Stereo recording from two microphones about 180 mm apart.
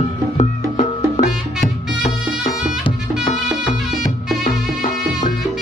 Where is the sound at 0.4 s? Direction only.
30° left (ahead or behind).